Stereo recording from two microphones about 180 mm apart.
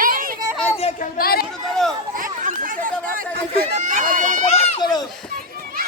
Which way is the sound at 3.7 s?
45° right (ahead or behind).